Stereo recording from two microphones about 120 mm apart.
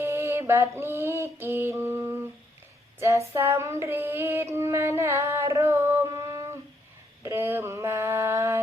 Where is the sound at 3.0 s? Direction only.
25° right (ahead or behind).